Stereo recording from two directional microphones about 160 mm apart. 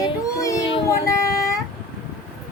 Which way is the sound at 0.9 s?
20° left (ahead or behind).